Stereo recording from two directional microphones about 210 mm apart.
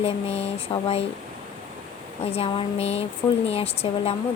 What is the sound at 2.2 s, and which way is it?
Speech, 30° left (ahead or behind).